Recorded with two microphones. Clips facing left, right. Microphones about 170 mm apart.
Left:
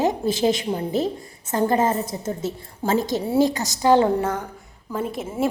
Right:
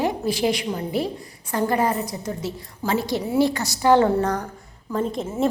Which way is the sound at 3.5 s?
20° left (ahead or behind).